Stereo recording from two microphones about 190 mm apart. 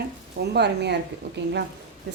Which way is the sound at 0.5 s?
65° right (ahead or behind).